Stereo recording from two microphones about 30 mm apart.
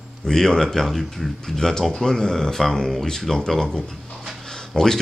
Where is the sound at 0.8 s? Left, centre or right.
Centre.